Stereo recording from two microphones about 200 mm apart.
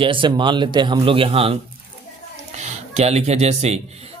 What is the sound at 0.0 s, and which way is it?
Speech, 25° right (ahead or behind).